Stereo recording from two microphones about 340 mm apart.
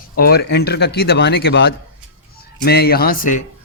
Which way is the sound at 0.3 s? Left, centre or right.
Left.